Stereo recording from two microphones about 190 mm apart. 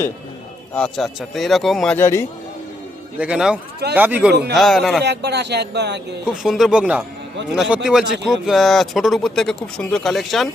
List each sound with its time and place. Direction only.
0.7 s speech: 5° left (ahead or behind)
2.0 s speech: 15° left (ahead or behind)
3.2 s speech: 5° right (ahead or behind)
5.0 s speech: 60° right (ahead or behind)
6.2 s speech: centre (ahead or behind)